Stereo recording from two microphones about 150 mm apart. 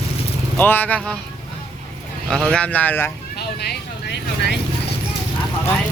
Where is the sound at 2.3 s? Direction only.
5° left (ahead or behind).